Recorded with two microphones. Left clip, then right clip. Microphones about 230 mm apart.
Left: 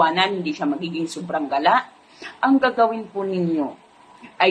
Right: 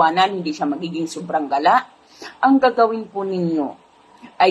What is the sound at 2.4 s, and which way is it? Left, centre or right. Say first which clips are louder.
Speech: right 3 dB; centre.